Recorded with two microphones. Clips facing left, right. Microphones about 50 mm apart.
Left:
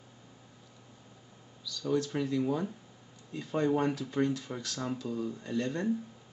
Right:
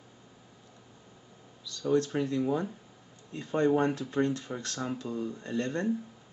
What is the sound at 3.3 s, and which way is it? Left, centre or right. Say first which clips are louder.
Speech: right 3 dB; right.